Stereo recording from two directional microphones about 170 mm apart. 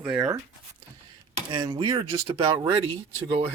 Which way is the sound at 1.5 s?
25° right (ahead or behind).